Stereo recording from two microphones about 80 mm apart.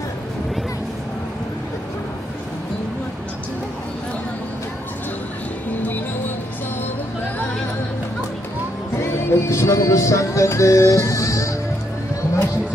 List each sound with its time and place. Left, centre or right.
5.7 s music: left
8.9 s music: left